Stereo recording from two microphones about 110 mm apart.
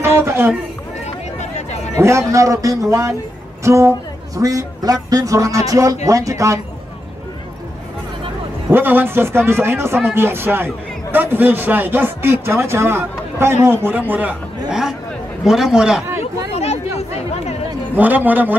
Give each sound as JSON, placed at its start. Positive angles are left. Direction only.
{"t": 0.2, "sound": "a sound", "side_deg": -20}
{"t": 1.0, "sound": "chatter", "side_deg": 90}
{"t": 2.0, "sound": "a man's voice", "side_deg": -25}
{"t": 8.6, "sound": "a man's voice", "side_deg": -20}
{"t": 16.5, "sound": "chatter", "side_deg": 70}
{"t": 17.9, "sound": "a man's voice", "side_deg": -15}